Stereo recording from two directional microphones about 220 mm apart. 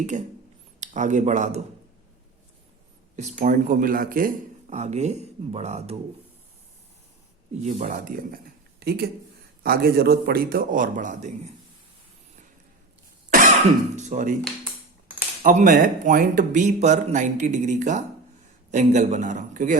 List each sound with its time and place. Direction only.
0.0 s a man's voice: 35° right (ahead or behind)
3.2 s a man's voice: 30° right (ahead or behind)
7.6 s a man's voice: 30° right (ahead or behind)
13.9 s a man's voice: 35° right (ahead or behind)
15.4 s a man's voice: 35° right (ahead or behind)